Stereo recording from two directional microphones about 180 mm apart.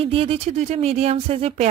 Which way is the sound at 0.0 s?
30° right (ahead or behind).